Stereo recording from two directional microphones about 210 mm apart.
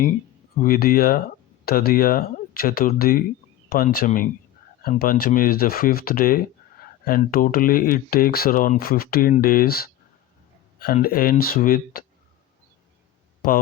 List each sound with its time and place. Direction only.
0.5 s speech: 45° left (ahead or behind)
11.0 s speech: 45° left (ahead or behind)